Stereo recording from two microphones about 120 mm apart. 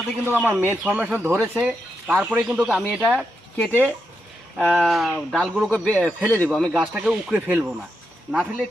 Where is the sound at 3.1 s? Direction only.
10° left (ahead or behind).